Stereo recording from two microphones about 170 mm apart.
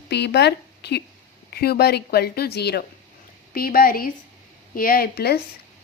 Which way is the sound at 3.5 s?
60° left (ahead or behind).